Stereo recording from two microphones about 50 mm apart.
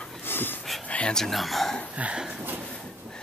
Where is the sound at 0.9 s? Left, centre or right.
Left.